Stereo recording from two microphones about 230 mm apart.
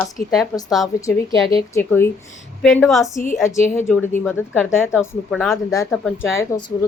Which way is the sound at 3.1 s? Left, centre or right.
Left.